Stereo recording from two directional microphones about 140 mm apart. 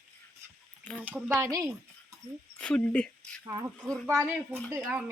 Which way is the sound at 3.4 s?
25° right (ahead or behind).